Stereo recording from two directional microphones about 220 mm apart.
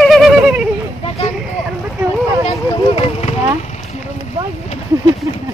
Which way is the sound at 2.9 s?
25° left (ahead or behind).